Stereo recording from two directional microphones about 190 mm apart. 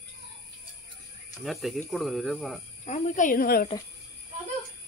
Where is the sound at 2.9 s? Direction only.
40° left (ahead or behind).